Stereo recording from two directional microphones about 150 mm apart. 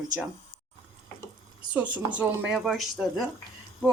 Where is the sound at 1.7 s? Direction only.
10° right (ahead or behind).